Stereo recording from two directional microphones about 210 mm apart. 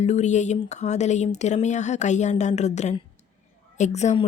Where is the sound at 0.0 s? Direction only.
35° left (ahead or behind).